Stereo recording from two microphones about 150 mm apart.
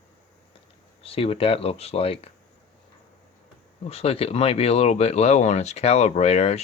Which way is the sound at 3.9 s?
40° left (ahead or behind).